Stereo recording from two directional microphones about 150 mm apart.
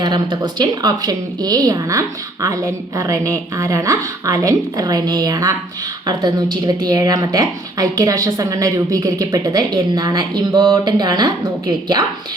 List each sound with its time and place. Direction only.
0.0 s a woman's voice: 30° right (ahead or behind)